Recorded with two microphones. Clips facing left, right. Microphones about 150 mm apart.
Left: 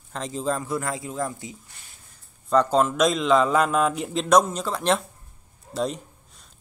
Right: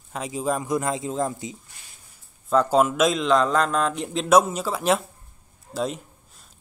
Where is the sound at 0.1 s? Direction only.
10° right (ahead or behind).